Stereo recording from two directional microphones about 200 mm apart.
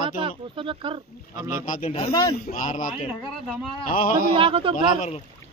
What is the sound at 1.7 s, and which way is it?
Speech, 30° left (ahead or behind).